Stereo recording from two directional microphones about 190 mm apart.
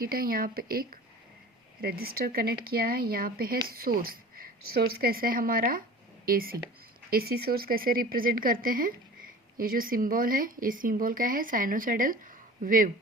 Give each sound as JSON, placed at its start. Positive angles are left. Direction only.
{"t": 0.0, "sound": "speech", "side_deg": -50}